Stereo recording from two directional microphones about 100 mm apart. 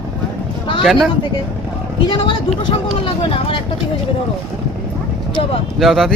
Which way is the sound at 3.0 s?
70° left (ahead or behind).